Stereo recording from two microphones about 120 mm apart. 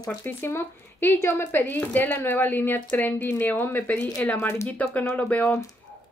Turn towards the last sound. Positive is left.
turn(degrees=10)  # may be behind; listen again after turning